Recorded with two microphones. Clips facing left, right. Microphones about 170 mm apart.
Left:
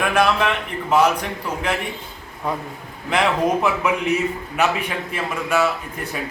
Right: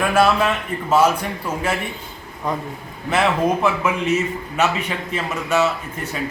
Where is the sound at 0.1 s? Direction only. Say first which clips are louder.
Right 3 dB; 5° right (ahead or behind).